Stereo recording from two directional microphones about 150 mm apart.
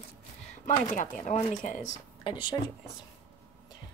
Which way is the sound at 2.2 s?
35° left (ahead or behind).